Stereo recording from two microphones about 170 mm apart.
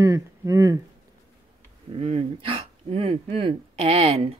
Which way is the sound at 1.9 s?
40° right (ahead or behind).